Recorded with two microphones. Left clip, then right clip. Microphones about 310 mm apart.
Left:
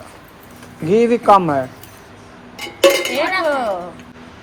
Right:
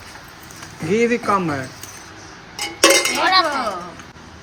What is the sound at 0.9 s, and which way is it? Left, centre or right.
Speech, centre.